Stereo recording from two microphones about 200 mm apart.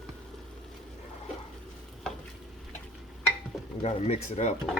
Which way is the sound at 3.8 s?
30° left (ahead or behind).